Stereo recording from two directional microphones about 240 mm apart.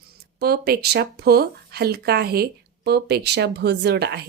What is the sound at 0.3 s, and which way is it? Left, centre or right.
Speech, right.